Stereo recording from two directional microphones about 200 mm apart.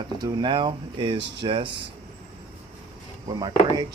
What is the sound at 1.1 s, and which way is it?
Speech, 60° right (ahead or behind).